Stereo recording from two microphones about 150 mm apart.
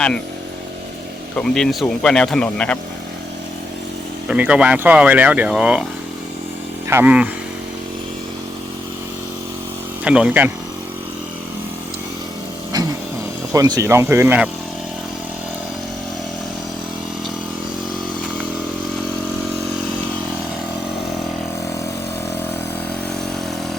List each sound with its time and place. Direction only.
1.4 s speech: 5° left (ahead or behind)
4.3 s speech: 5° right (ahead or behind)
6.8 s speech: 15° right (ahead or behind)
10.0 s speech: 5° right (ahead or behind)
13.5 s speech: 25° right (ahead or behind)